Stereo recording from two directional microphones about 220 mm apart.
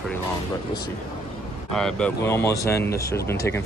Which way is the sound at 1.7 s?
5° left (ahead or behind).